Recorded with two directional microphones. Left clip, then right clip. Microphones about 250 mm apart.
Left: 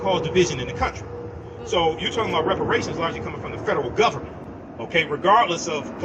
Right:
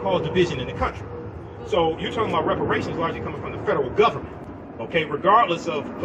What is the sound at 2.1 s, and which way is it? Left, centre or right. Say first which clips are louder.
Speech: left 1 dB; left.